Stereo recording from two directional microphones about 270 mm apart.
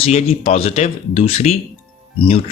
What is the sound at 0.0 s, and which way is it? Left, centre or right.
Speech, left.